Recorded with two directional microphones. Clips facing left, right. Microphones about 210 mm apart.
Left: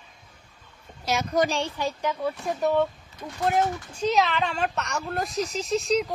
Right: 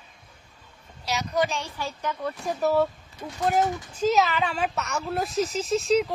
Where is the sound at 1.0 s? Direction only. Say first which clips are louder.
Left 2 dB; 50° left (ahead or behind).